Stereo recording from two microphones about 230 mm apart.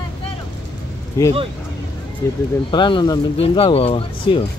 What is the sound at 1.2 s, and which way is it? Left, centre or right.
Speech, centre.